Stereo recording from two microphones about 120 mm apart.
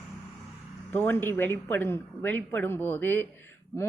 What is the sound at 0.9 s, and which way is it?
Speech, 15° left (ahead or behind).